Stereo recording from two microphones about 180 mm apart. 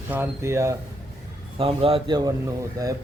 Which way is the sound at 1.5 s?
30° right (ahead or behind).